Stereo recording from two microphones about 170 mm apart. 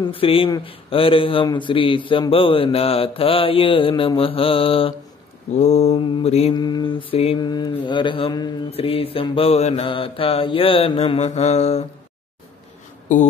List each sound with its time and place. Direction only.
0.0 s a man's voice: 35° left (ahead or behind)
5.5 s mantra: 40° left (ahead or behind)
5.9 s a man's voice: 30° left (ahead or behind)
6.5 s mantra: 25° left (ahead or behind)
8.7 s a man's voice: 35° left (ahead or behind)